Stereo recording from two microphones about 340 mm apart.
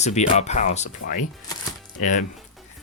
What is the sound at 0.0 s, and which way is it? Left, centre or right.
Speech, centre.